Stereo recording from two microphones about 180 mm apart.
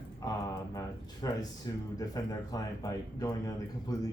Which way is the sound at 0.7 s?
20° left (ahead or behind).